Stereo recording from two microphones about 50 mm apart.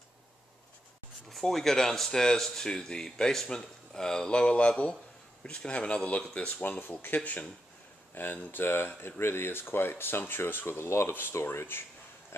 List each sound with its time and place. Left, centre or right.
1.3 s speech: centre; by 6.5 s left
6.8 s speech: left
11.1 s speech: left